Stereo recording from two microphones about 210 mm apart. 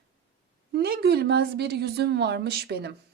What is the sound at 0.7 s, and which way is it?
A woman's voice, 50° right (ahead or behind).